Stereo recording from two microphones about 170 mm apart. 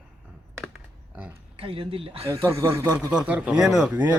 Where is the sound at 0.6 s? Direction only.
5° right (ahead or behind).